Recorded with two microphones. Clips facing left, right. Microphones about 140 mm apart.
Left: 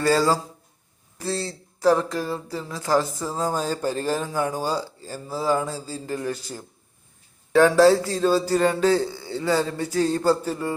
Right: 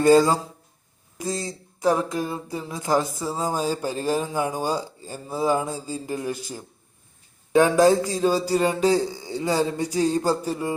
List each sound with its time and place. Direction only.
0.0 s speech: 20° right (ahead or behind)